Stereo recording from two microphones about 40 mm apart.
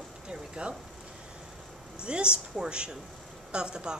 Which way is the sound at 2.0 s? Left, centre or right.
Right.